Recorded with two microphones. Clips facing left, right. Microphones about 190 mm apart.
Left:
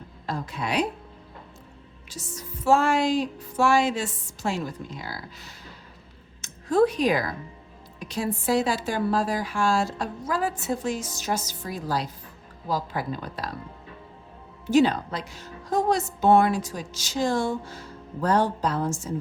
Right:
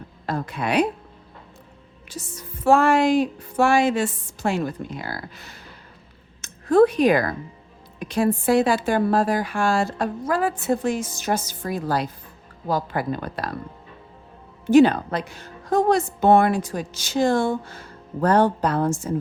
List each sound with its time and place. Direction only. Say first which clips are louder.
0.3 s a woman's voice: right 4 dB; 60° right (ahead or behind)
2.0 s a woman's voice: right 2 dB; 55° right (ahead or behind)
14.7 s a woman's voice: right 6 dB; 55° right (ahead or behind)